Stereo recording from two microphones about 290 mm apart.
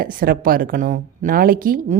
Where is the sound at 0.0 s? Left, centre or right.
Right.